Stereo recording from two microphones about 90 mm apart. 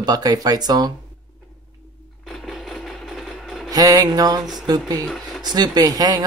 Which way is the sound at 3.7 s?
45° right (ahead or behind).